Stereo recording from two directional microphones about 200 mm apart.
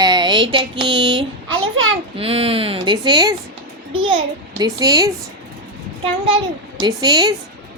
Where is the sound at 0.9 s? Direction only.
20° right (ahead or behind).